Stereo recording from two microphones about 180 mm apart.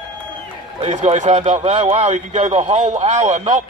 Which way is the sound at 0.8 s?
40° right (ahead or behind).